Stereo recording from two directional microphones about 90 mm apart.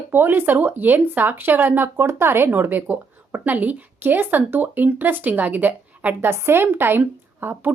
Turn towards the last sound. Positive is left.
turn(degrees=-20)  # may be behind; listen again after turning